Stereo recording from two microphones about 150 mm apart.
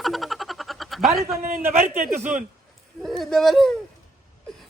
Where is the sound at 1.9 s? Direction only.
60° right (ahead or behind).